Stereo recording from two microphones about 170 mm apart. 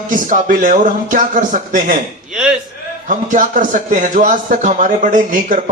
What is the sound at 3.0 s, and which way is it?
Speech, 50° right (ahead or behind).